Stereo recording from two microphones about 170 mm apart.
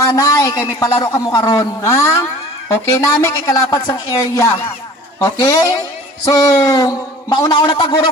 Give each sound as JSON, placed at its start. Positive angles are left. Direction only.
{"t": 0.0, "sound": "a man's voice", "side_deg": 20}